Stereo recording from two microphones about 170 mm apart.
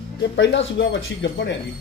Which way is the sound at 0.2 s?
90° left.